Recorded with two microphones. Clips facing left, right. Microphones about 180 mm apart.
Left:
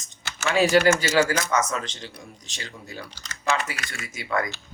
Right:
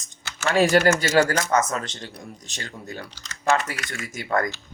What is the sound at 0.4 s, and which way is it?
Speech, 45° right (ahead or behind).